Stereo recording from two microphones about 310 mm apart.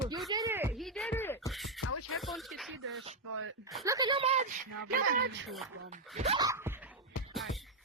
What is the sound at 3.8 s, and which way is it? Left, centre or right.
Speech, centre.